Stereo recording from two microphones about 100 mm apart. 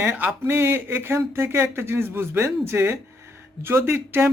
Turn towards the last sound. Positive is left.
turn(degrees=-25)  # may be behind; listen again after turning